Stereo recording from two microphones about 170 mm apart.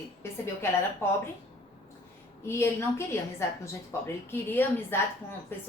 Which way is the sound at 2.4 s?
15° left (ahead or behind).